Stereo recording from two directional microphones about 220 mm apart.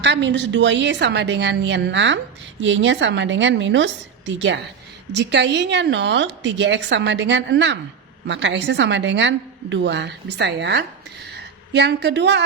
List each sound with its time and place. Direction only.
0.0 s a woman's voice: 55° right (ahead or behind)